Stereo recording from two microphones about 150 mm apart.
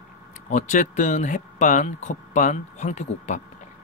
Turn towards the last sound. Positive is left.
turn(degrees=50)  # may be behind; listen again after turning